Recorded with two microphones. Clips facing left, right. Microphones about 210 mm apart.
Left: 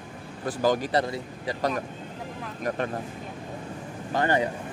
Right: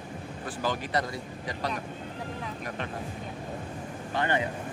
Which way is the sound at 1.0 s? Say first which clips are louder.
Left 4 dB; 25° left (ahead or behind).